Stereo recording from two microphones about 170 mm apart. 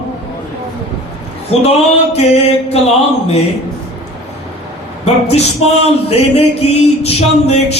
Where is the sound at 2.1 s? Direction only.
35° left (ahead or behind).